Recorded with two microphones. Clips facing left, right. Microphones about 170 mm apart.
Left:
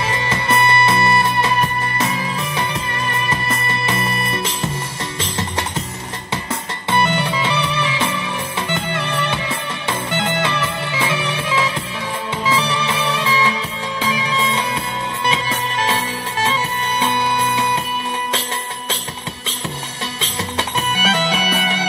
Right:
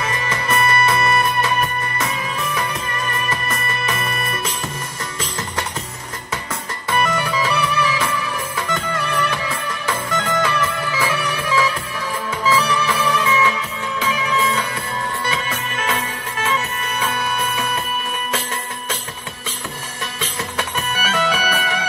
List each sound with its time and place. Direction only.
0.0 s music: 30° left (ahead or behind)
6.9 s music: 30° left (ahead or behind)
20.2 s music: 25° left (ahead or behind)